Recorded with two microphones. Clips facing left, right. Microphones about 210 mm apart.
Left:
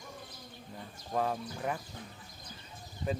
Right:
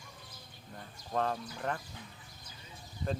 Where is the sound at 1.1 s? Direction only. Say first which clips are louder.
Left 1 dB; 10° left (ahead or behind).